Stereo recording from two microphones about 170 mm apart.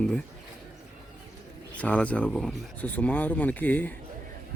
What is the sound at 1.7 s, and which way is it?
Speech, 10° left (ahead or behind).